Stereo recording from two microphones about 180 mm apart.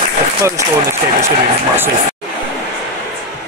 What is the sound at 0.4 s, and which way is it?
Speech, 15° right (ahead or behind).